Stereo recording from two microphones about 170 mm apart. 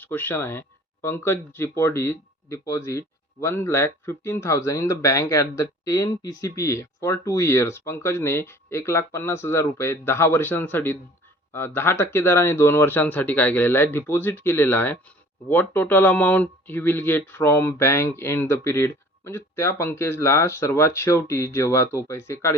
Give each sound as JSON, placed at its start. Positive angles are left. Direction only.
{"t": 0.0, "sound": "speech", "side_deg": 10}